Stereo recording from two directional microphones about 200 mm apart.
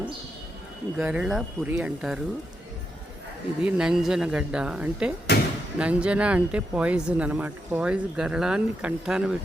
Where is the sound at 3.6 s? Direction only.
5° right (ahead or behind).